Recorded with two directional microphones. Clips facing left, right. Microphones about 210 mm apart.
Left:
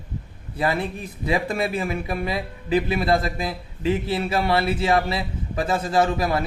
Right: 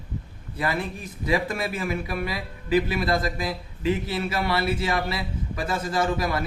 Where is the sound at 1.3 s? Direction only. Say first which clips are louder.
Left 2 dB; 25° left (ahead or behind).